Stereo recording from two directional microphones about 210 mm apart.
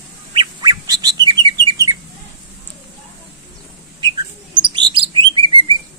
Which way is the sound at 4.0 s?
20° right (ahead or behind).